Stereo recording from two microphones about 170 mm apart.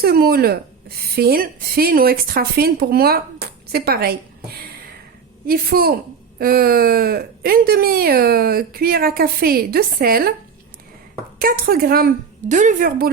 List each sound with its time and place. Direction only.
0.0 s a woman's voice: 65° right (ahead or behind)
11.3 s a woman's voice: 60° right (ahead or behind)